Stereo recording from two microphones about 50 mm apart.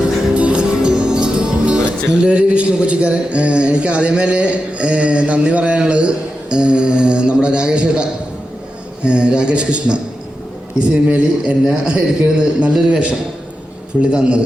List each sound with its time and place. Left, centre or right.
0.3 s music: right
5.8 s a man's voice: right
9.0 s a man's voice: centre